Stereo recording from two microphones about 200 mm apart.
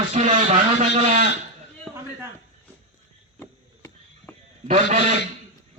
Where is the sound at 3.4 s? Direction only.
15° left (ahead or behind).